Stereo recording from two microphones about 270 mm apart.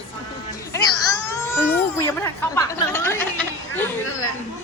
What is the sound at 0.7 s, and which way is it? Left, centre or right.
Baby cry, centre.